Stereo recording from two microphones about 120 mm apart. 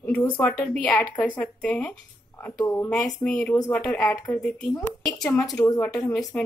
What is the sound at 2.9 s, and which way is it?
A woman's voice, 5° left (ahead or behind).